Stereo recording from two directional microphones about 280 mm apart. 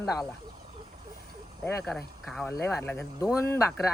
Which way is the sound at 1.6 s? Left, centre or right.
Centre.